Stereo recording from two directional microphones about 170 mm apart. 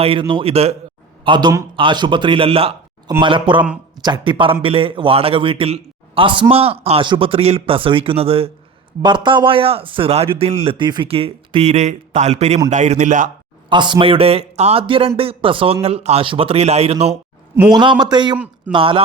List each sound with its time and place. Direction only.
0.0 s a man's voice: 30° right (ahead or behind)
1.2 s a man's voice: 25° right (ahead or behind); by 13.3 s 45° right (ahead or behind)
13.7 s a man's voice: 25° right (ahead or behind)
17.5 s a man's voice: 15° right (ahead or behind)
17.7 s speech: 25° right (ahead or behind)
18.3 s speech: 10° right (ahead or behind)
18.7 s a man's voice: 30° right (ahead or behind)